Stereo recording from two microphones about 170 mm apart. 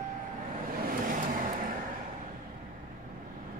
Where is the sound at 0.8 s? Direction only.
55° right (ahead or behind).